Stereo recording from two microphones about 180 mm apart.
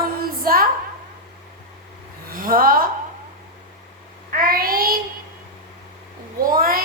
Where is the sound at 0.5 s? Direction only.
55° right (ahead or behind).